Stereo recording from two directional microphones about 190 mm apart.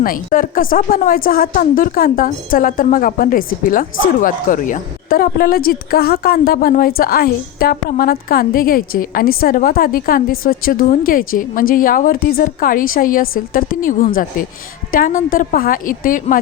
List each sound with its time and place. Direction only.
0.0 s a woman's voice: 45° left (ahead or behind)